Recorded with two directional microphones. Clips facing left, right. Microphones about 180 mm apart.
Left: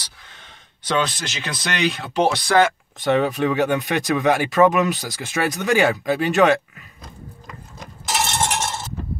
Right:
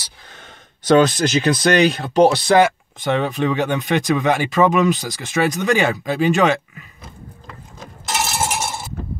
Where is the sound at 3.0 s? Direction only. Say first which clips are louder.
Left 1 dB; centre (ahead or behind).